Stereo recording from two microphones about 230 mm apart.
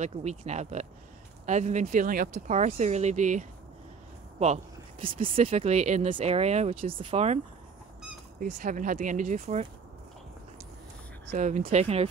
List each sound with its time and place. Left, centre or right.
0.0 s speech: right
8.4 s speech: right
11.3 s speech: right